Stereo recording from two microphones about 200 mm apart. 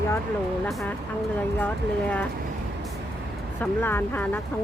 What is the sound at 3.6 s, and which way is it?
Speech, 10° left (ahead or behind).